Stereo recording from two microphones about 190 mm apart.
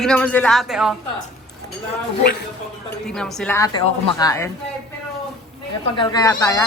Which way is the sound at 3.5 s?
20° left (ahead or behind).